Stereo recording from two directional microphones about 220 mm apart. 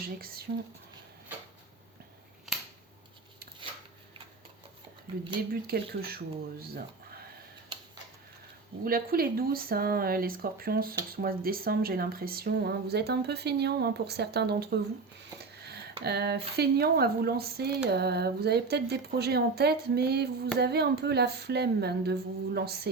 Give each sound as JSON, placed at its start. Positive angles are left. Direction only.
{"t": 0.5, "sound": "speech", "side_deg": -40}
{"t": 5.6, "sound": "speech", "side_deg": -45}
{"t": 8.8, "sound": "speech", "side_deg": -40}
{"t": 15.6, "sound": "a sound", "side_deg": -50}
{"t": 16.6, "sound": "speech", "side_deg": -45}